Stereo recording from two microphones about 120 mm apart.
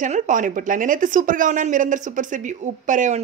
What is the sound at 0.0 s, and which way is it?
Speech, 90° right.